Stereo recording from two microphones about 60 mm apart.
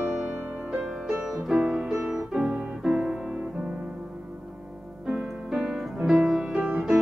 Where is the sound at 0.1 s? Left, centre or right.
Centre.